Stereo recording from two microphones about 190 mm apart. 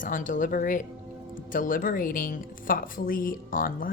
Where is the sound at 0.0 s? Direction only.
45° left (ahead or behind).